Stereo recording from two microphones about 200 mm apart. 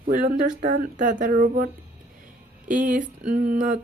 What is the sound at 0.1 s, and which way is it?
Speech, 45° right (ahead or behind).